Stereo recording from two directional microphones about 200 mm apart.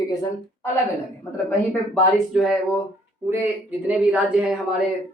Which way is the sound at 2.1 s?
Centre (ahead or behind).